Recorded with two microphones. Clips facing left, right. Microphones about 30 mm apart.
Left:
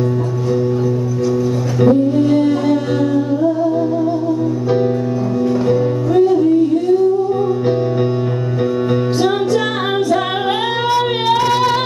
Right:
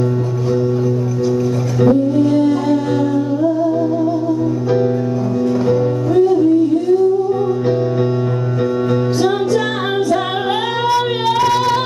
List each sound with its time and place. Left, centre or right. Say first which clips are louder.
1.8 s humming: even; centre
5.7 s music: even; centre
10.8 s child singing: even; centre